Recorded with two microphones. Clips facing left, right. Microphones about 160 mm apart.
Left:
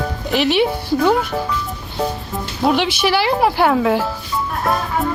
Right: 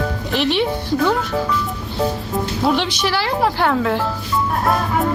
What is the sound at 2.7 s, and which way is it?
Speech, 5° left (ahead or behind).